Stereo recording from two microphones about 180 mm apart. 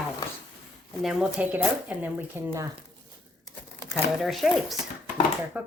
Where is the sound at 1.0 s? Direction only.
Centre (ahead or behind).